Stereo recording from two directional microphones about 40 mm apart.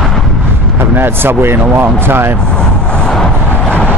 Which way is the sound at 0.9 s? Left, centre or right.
Right.